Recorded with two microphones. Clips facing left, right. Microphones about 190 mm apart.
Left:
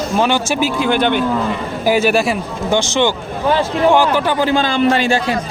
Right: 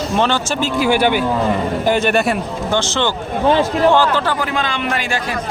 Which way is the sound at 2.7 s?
15° left (ahead or behind).